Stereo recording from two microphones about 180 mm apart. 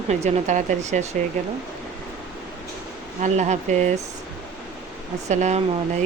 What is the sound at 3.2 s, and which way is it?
Speech, 40° right (ahead or behind).